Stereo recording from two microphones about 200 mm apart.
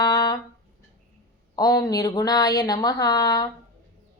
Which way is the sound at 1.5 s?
20° left (ahead or behind).